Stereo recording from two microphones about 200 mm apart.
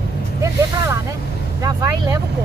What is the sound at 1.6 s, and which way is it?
Speech, 20° right (ahead or behind).